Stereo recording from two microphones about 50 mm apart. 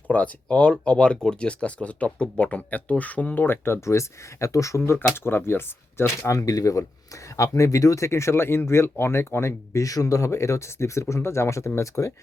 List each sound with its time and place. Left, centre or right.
0.1 s speech: left
3.3 s speech: left
3.8 s speech: left
5.1 s speech: left
6.2 s speech: left